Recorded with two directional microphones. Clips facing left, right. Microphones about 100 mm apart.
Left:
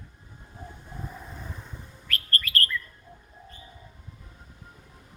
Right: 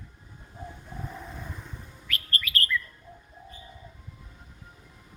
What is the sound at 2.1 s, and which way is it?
Chirp, 45° left (ahead or behind).